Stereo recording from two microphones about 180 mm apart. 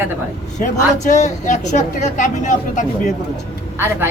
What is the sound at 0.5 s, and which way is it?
A woman's voice, 40° left (ahead or behind).